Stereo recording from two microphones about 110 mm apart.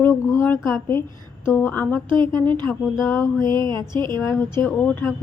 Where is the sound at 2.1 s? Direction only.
45° right (ahead or behind).